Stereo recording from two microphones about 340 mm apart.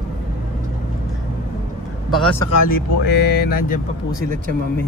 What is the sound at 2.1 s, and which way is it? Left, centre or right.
Speech, centre.